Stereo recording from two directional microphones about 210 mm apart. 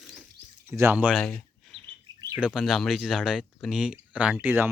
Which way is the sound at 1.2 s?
5° left (ahead or behind).